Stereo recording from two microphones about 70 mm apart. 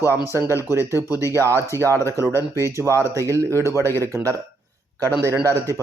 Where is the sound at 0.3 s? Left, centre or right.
Right.